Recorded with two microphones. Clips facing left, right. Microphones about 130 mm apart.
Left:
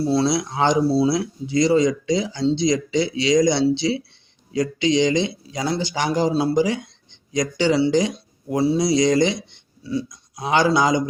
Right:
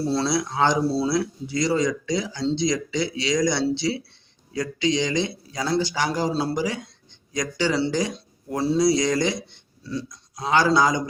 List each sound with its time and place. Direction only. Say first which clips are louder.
0.1 s speech: left 4 dB; 15° left (ahead or behind)